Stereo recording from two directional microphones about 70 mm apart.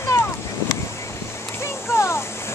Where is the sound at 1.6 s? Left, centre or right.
Left.